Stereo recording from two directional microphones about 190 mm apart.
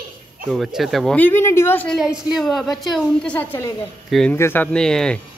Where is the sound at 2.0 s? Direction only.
5° right (ahead or behind).